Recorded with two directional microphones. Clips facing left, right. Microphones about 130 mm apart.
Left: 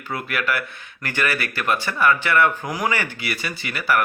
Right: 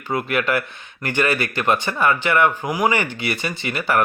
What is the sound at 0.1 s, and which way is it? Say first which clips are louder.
Speech: right 4 dB; 25° right (ahead or behind).